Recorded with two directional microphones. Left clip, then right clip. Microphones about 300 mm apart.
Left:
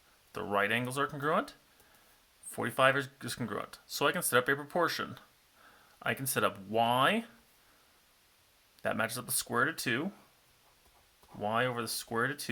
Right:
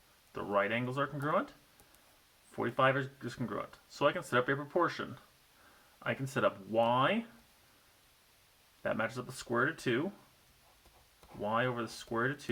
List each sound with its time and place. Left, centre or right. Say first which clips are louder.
0.3 s speech: left 2 dB; left
2.5 s speech: left 2 dB; left
8.8 s speech: left 2 dB; left
11.4 s speech: left 2 dB; left